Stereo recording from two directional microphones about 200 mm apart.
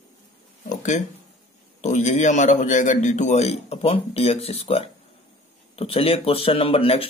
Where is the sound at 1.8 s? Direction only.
35° left (ahead or behind).